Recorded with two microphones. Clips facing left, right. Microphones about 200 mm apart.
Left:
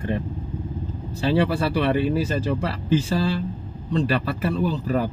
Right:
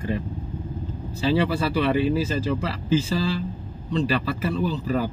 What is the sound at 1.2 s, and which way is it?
Speech, 55° left (ahead or behind).